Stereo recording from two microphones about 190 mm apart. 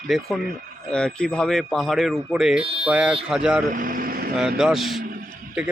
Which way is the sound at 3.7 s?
45° right (ahead or behind).